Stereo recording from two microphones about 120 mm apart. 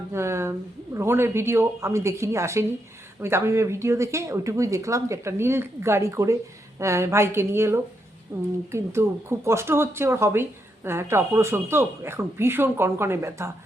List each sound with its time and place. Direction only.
0.1 s speech: 20° right (ahead or behind)